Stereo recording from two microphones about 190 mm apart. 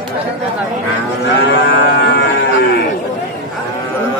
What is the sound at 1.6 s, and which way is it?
Livestock, 60° left (ahead or behind).